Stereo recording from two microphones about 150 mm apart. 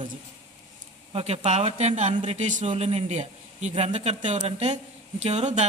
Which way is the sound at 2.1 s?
35° right (ahead or behind).